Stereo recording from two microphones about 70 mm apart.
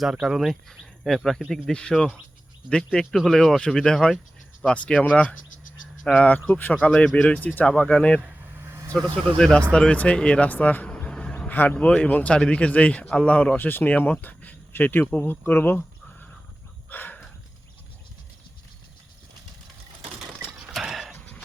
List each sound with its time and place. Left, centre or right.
0.0 s speech: centre
7.3 s speech: left
7.7 s speech: centre
7.9 s speech: centre
8.2 s vehicle: right
9.4 s speech: centre
10.8 s vehicle: centre
11.5 s speech: left
16.9 s a sound: left
20.8 s a sound: centre